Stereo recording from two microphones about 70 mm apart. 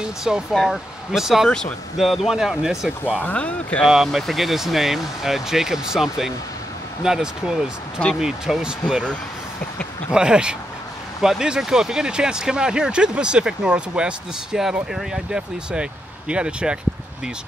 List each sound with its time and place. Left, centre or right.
0.0 s speech: centre
3.2 s speech: left
3.9 s speech: centre
10.1 s speech: centre